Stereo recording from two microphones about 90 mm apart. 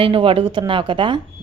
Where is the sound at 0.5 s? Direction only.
65° right (ahead or behind).